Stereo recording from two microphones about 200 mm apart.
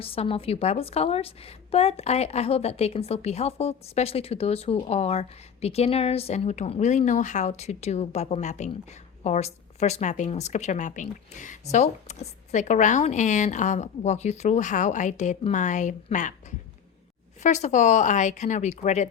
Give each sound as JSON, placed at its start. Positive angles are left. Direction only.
{"t": 0.0, "sound": "a woman's voice", "side_deg": 30}
{"t": 17.4, "sound": "a woman's voice", "side_deg": 35}